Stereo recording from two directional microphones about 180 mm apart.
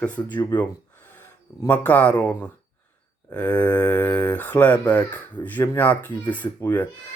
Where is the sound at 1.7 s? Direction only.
10° left (ahead or behind).